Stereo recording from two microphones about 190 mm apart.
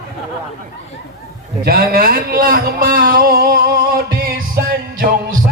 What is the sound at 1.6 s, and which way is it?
A man's voice, 50° right (ahead or behind).